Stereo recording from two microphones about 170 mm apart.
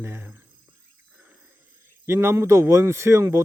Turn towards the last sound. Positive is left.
turn(degrees=-15)  # may be behind; listen again after turning